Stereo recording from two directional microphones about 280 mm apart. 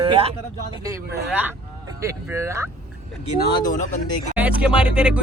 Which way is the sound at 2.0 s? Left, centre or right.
Centre.